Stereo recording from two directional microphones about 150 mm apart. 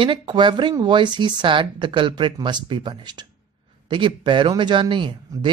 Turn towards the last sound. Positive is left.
turn(degrees=-30)  # may be behind; listen again after turning